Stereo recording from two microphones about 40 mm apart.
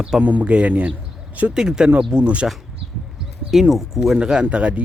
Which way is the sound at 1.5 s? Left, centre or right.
Centre.